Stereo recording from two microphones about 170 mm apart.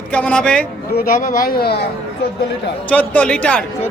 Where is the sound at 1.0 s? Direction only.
55° left (ahead or behind).